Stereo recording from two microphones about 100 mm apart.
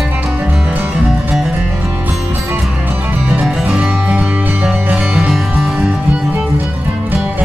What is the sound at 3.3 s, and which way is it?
Music, 5° right (ahead or behind).